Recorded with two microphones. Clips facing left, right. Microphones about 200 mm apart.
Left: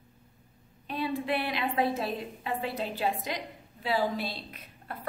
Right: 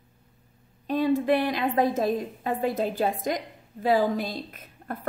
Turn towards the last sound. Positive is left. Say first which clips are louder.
# right 6 dB
turn(degrees=-50)  # may be behind; listen again after turning